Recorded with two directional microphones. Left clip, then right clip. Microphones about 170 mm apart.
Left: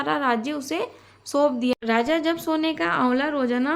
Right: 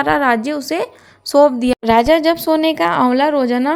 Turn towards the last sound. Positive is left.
turn(degrees=-30)  # may be behind; listen again after turning